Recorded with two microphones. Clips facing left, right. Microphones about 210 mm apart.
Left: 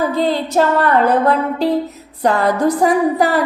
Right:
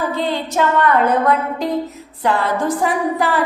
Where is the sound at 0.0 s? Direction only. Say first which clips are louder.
Left 4 dB; 40° left (ahead or behind).